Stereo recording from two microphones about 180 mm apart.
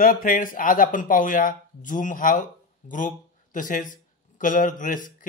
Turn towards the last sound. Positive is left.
turn(degrees=50)  # may be behind; listen again after turning